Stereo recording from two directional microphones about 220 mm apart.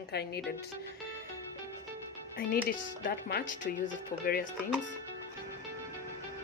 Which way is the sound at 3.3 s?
45° left (ahead or behind).